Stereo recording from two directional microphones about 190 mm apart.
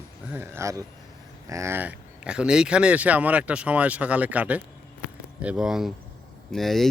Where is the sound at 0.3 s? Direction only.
15° right (ahead or behind).